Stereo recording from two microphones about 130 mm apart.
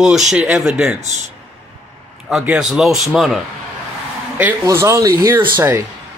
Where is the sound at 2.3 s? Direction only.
5° right (ahead or behind).